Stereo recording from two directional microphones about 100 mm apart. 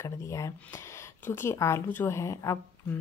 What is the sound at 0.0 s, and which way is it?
Speech, 30° left (ahead or behind).